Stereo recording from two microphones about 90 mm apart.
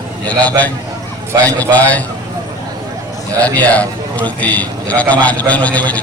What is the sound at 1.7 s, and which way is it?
Speech, 15° left (ahead or behind).